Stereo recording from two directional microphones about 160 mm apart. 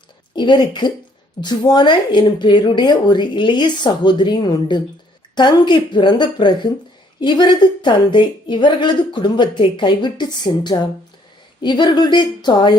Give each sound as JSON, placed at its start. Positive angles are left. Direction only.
{"t": 0.3, "sound": "a woman's voice", "side_deg": 30}